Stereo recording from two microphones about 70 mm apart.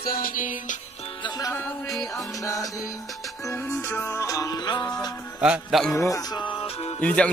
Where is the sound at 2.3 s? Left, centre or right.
Left.